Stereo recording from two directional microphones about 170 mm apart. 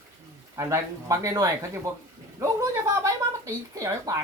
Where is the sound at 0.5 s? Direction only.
15° right (ahead or behind).